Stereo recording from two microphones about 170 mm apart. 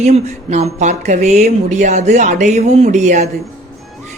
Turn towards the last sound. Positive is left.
turn(degrees=-45)  # may be behind; listen again after turning